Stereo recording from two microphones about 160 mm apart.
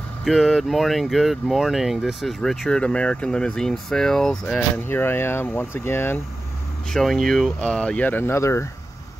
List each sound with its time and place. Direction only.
0.2 s speech: centre (ahead or behind)
6.9 s speech: centre (ahead or behind); by 8.6 s 15° left (ahead or behind)